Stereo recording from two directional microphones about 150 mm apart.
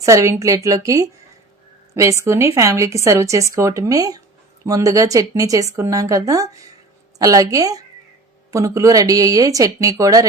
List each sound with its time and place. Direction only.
0.0 s speech: 20° right (ahead or behind)